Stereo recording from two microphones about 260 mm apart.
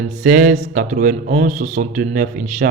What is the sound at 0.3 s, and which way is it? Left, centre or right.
Speech, right.